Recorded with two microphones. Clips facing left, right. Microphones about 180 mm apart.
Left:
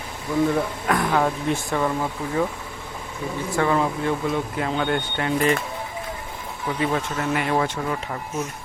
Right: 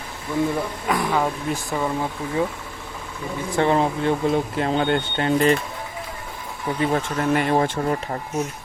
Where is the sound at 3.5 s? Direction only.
30° right (ahead or behind).